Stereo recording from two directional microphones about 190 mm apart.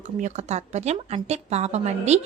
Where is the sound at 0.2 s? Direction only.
40° right (ahead or behind).